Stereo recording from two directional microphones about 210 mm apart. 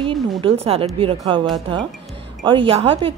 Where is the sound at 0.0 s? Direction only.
25° right (ahead or behind).